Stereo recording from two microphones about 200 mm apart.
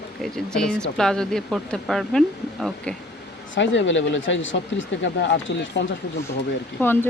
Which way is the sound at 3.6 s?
65° left (ahead or behind).